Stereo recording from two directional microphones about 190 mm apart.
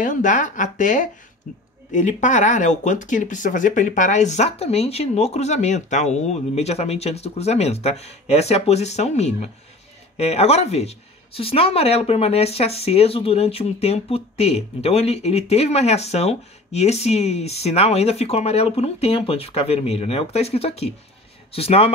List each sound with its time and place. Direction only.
0.0 s speech: 40° left (ahead or behind)